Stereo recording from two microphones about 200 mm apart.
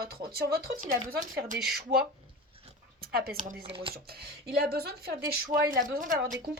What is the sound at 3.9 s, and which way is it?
Speech, 50° right (ahead or behind).